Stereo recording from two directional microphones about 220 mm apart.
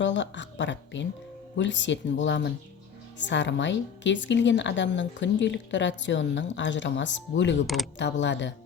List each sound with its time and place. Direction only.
0.0 s a woman's voice: 55° left (ahead or behind)